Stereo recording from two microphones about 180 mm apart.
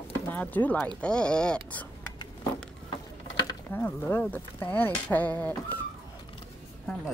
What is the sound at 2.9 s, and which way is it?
Ratchet, 25° left (ahead or behind).